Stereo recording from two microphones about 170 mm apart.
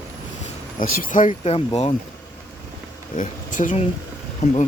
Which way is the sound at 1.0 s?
50° left (ahead or behind).